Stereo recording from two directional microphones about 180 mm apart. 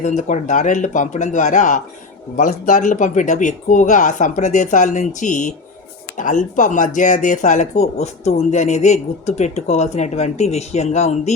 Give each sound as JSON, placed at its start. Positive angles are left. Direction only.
{"t": 0.0, "sound": "speech", "side_deg": 45}